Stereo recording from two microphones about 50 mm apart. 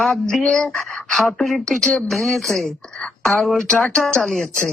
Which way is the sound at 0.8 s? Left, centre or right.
Centre.